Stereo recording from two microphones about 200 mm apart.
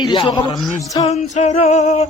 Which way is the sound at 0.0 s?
25° left (ahead or behind).